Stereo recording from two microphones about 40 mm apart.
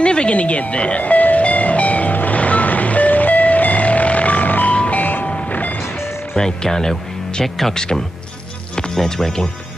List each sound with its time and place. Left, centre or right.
0.0 s music: left
4.9 s vehicle: left
5.2 s train: left
5.5 s music: left
6.3 s speech: centre
7.7 s speech: centre